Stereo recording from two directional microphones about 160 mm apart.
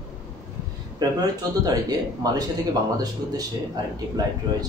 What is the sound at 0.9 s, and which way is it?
A man's voice, 25° right (ahead or behind).